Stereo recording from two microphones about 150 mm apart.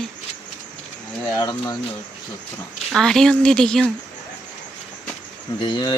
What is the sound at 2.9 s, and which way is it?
Speech, 5° left (ahead or behind).